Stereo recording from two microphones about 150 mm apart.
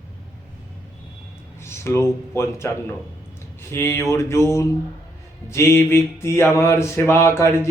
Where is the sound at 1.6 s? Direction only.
15° left (ahead or behind).